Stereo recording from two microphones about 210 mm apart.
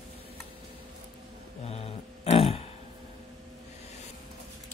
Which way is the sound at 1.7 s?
30° left (ahead or behind).